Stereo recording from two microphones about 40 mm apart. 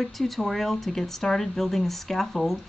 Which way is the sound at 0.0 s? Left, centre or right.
Centre.